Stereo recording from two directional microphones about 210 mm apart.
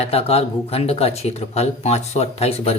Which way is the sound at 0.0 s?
30° left (ahead or behind).